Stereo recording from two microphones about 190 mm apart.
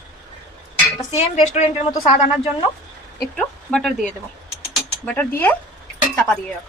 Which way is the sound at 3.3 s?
5° left (ahead or behind).